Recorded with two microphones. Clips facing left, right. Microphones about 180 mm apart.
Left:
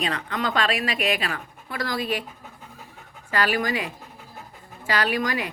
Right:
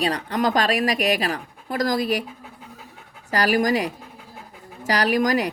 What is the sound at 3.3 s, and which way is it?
Speech, 40° right (ahead or behind).